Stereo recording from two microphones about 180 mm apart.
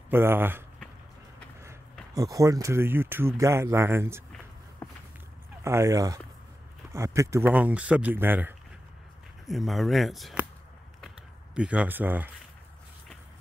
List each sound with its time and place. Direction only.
0.1 s speech: 10° right (ahead or behind)
2.1 s speech: 20° right (ahead or behind)
5.6 s speech: 15° right (ahead or behind)
9.5 s speech: centre (ahead or behind)
11.0 s a sound: 5° right (ahead or behind)